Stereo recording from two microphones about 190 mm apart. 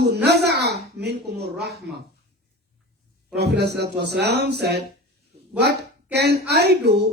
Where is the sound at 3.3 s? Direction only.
60° right (ahead or behind).